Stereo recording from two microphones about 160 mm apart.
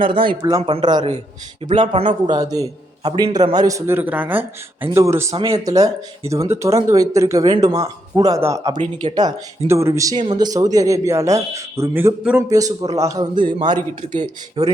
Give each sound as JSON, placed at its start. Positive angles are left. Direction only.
{"t": 0.0, "sound": "a man's voice", "side_deg": -30}
{"t": 5.4, "sound": "speech", "side_deg": -35}
{"t": 5.6, "sound": "a man's voice", "side_deg": -20}
{"t": 14.2, "sound": "speech", "side_deg": -40}